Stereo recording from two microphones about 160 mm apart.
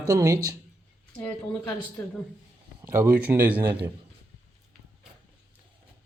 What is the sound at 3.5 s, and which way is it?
Speech, 30° right (ahead or behind).